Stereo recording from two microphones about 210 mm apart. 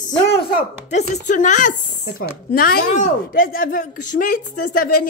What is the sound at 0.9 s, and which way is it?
Speech, 35° left (ahead or behind).